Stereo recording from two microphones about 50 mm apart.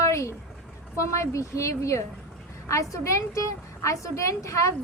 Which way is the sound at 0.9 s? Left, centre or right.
Left.